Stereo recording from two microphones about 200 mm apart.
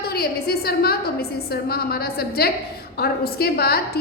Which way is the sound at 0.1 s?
50° left (ahead or behind).